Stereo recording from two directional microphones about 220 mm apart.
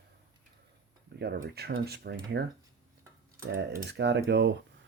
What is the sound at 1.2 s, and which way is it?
Speech, 45° right (ahead or behind).